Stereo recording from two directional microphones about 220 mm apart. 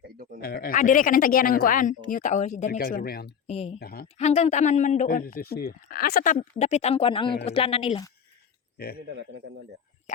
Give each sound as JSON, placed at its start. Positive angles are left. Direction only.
{"t": 0.4, "sound": "speech", "side_deg": 40}
{"t": 3.4, "sound": "speech", "side_deg": 25}
{"t": 3.8, "sound": "speech", "side_deg": 45}
{"t": 4.2, "sound": "speech", "side_deg": 30}